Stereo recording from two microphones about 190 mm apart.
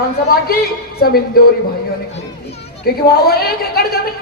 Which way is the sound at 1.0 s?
55° left (ahead or behind).